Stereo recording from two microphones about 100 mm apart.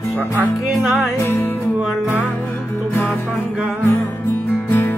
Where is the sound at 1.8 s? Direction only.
10° right (ahead or behind).